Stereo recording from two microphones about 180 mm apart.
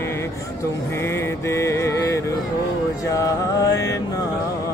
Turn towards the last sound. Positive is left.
turn(degrees=20)  # may be behind; listen again after turning